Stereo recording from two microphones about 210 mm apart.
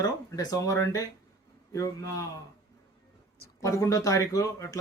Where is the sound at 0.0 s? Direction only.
15° left (ahead or behind).